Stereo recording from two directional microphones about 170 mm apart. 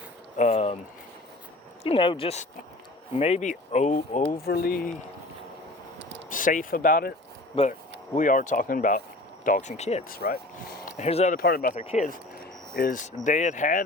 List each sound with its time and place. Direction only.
0.3 s a sound: 40° left (ahead or behind)
1.8 s speech: 30° left (ahead or behind); by 4.9 s 60° left (ahead or behind)
6.0 s a sound: 90° right
6.3 s speech: 50° left (ahead or behind)
10.1 s speech: 60° left (ahead or behind)
10.9 s speech: 40° left (ahead or behind)
11.3 s speech: 65° left (ahead or behind)
11.7 s speech: 40° left (ahead or behind)
12.7 s speech: 55° left (ahead or behind)